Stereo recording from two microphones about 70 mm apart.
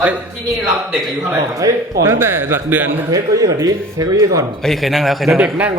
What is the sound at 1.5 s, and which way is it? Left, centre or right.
Speech, right.